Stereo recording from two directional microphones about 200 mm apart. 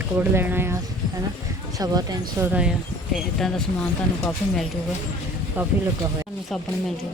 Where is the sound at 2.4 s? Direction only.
5° right (ahead or behind).